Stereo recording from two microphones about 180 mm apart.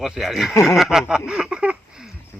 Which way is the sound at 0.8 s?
5° right (ahead or behind).